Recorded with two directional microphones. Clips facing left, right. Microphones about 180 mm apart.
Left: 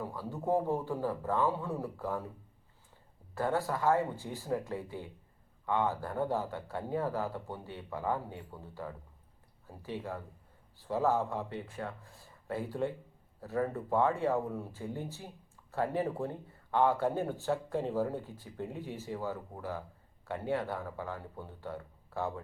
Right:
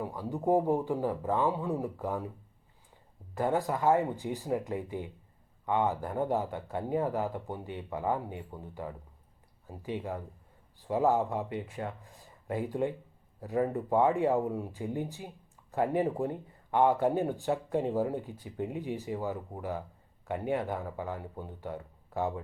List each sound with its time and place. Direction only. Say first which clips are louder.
0.0 s speech: right 5 dB; 15° right (ahead or behind)
3.3 s speech: right 3 dB; 15° right (ahead or behind)